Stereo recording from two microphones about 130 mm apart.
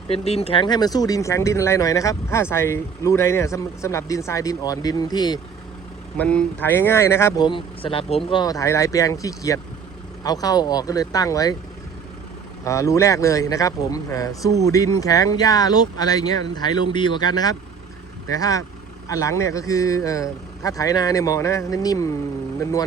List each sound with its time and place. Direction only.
0.1 s speech: 50° left (ahead or behind); by 5.4 s 30° left (ahead or behind)
6.1 s speech: 10° left (ahead or behind)
7.3 s speech: 40° left (ahead or behind)
8.4 s speech: 25° left (ahead or behind)
12.6 s speech: 25° left (ahead or behind)